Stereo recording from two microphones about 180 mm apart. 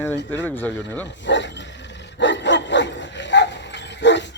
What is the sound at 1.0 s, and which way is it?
Dog, 80° left.